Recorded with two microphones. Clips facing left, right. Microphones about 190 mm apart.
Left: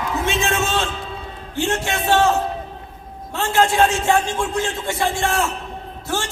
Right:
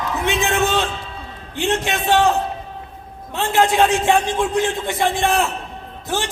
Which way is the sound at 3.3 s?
20° right (ahead or behind).